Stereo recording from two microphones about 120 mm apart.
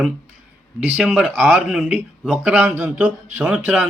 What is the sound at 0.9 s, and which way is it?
Speech, 5° right (ahead or behind).